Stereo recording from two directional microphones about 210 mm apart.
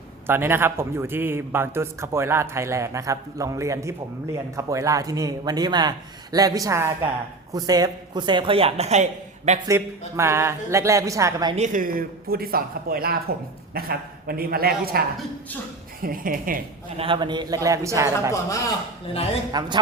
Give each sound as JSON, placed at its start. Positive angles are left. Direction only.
{"t": 0.3, "sound": "a man's voice", "side_deg": -10}
{"t": 10.2, "sound": "a man's voice", "side_deg": -10}
{"t": 11.5, "sound": "speech", "side_deg": -35}
{"t": 17.0, "sound": "a man's voice", "side_deg": -25}
{"t": 18.4, "sound": "a man's voice", "side_deg": 15}
{"t": 19.5, "sound": "speech", "side_deg": -20}